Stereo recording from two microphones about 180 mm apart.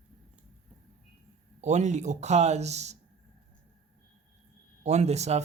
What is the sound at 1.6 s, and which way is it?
Speech, 40° right (ahead or behind).